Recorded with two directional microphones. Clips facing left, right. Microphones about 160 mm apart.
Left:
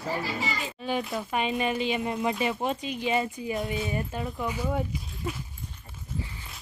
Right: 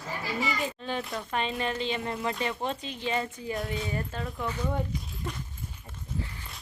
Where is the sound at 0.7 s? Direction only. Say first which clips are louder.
Left 4 dB; 10° left (ahead or behind).